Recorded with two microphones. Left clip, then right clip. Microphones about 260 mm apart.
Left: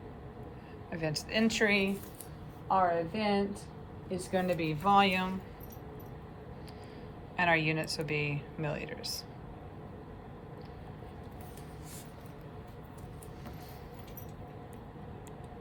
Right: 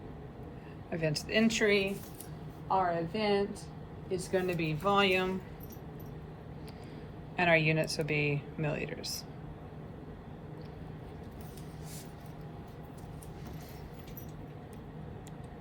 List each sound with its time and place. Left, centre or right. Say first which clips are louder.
1.0 s speech: right 2 dB; centre
2.6 s a woman's voice: left 2 dB; left; by 5.3 s centre
7.3 s speech: right 2 dB; centre